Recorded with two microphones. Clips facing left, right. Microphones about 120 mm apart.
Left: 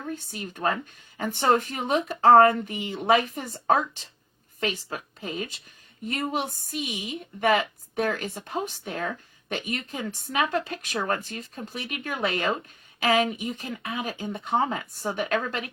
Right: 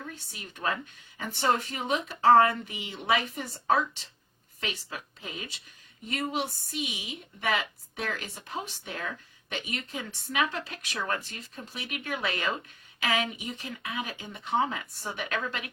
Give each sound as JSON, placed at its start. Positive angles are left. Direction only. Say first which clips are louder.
{"t": 0.0, "sound": "a woman's voice", "louder": "left 8 dB", "side_deg": 45}